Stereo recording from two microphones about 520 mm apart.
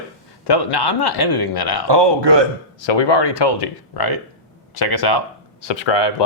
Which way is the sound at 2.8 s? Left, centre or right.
Left.